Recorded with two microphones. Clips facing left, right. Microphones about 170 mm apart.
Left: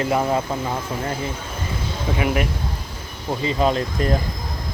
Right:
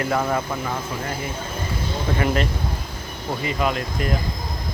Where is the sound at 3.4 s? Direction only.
30° left (ahead or behind).